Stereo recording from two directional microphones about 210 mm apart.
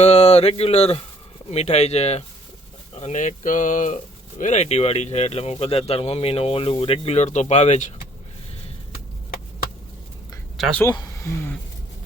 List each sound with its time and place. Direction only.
0.0 s speech: 30° left (ahead or behind)
10.6 s speech: 5° left (ahead or behind)
10.8 s speech: 15° left (ahead or behind)